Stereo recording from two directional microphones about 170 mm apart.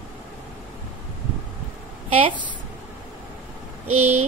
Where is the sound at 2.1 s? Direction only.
30° right (ahead or behind).